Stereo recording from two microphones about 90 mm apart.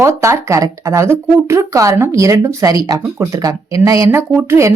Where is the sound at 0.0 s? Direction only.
35° right (ahead or behind).